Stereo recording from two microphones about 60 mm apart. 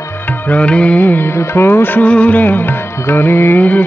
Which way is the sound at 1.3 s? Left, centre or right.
Left.